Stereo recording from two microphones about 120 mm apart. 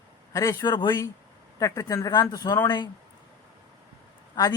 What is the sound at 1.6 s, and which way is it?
A man's voice, 25° left (ahead or behind).